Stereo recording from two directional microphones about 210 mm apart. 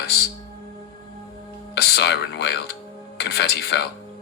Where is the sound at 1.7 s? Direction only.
50° left (ahead or behind).